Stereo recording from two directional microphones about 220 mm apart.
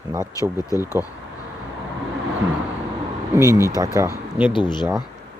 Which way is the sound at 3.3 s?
10° right (ahead or behind).